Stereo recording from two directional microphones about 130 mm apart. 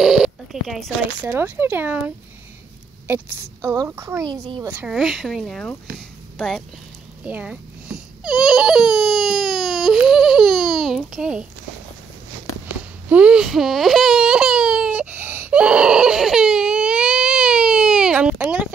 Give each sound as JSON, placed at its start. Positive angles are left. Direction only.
{"t": 0.0, "sound": "telephone", "side_deg": -5}
{"t": 1.2, "sound": "a child's voice", "side_deg": -15}
{"t": 4.6, "sound": "speech", "side_deg": -10}
{"t": 5.9, "sound": "a sound", "side_deg": 0}
{"t": 7.2, "sound": "baby cry", "side_deg": -10}
{"t": 13.1, "sound": "baby cry", "side_deg": -10}
{"t": 18.4, "sound": "a sound", "side_deg": -10}